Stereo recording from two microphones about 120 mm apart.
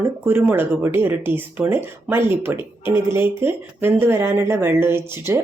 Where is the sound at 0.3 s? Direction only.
20° right (ahead or behind).